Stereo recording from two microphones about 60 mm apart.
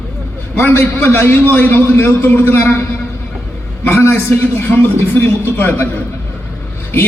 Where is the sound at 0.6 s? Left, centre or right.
Left.